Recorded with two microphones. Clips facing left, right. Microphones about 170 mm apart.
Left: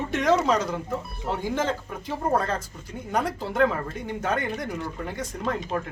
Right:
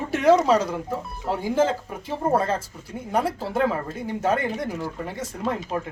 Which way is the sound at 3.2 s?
30° right (ahead or behind).